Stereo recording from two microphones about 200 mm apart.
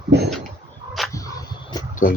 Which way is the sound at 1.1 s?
20° left (ahead or behind).